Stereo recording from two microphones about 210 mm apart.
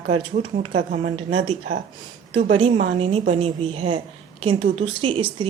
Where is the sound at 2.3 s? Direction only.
25° right (ahead or behind).